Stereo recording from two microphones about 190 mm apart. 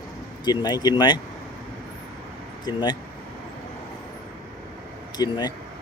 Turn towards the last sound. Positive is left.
turn(degrees=20)  # may be behind; listen again after turning